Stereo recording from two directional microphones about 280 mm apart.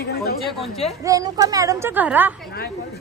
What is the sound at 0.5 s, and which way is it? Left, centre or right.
Speech, centre.